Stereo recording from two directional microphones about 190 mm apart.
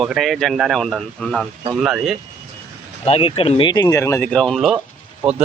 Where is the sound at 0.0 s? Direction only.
Centre (ahead or behind).